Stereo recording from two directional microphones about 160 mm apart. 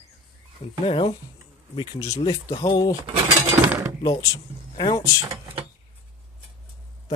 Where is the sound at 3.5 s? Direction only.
15° right (ahead or behind).